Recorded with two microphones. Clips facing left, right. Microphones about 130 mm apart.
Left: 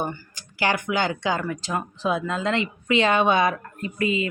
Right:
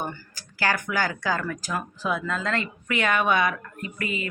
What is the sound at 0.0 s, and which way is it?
Speech, 20° left (ahead or behind).